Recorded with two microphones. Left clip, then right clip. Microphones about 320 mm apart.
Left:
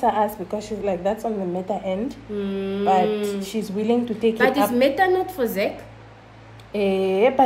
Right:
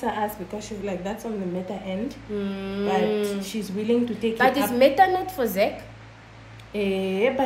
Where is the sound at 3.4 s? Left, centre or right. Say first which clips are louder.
Left 4 dB; left.